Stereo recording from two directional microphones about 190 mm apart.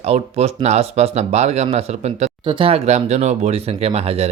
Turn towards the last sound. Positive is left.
turn(degrees=-35)  # may be behind; listen again after turning